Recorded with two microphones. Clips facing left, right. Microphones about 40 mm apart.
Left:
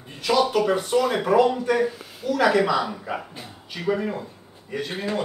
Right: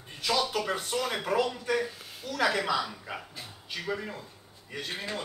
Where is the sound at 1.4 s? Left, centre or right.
Left.